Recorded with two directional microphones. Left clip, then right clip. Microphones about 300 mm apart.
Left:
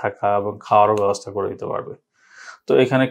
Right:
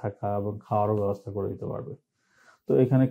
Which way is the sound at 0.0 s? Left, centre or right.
Centre.